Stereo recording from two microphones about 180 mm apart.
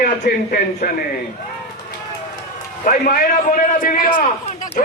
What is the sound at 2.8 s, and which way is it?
A man's voice, 55° left (ahead or behind).